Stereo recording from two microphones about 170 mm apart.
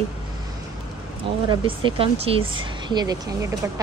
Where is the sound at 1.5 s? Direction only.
30° right (ahead or behind).